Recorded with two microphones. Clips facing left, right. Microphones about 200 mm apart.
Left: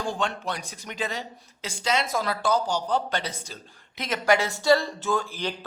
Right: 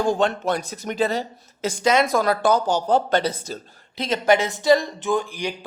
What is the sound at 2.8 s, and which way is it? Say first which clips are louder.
Speech: right 8 dB; 45° right (ahead or behind).